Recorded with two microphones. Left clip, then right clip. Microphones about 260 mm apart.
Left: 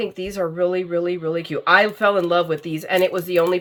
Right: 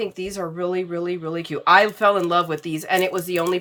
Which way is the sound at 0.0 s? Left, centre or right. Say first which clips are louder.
Left 3 dB; centre.